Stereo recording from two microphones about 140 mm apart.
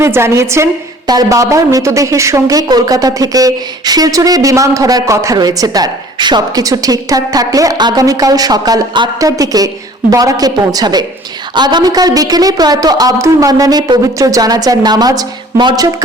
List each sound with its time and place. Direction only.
0.0 s a woman's voice: 20° right (ahead or behind)